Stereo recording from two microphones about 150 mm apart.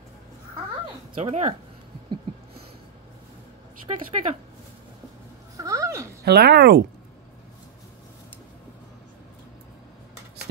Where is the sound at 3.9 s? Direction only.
35° right (ahead or behind).